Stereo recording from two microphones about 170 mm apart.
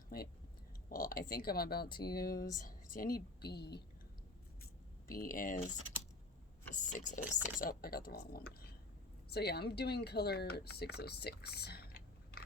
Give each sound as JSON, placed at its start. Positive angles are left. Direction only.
{"t": 0.9, "sound": "a woman's voice", "side_deg": 55}
{"t": 5.0, "sound": "a woman's voice", "side_deg": 55}
{"t": 6.7, "sound": "speech", "side_deg": 45}
{"t": 7.2, "sound": "speech", "side_deg": -10}
{"t": 7.6, "sound": "a woman's voice", "side_deg": 60}